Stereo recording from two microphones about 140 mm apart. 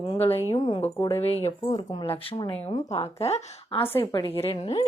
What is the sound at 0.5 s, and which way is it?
Speech, 30° left (ahead or behind).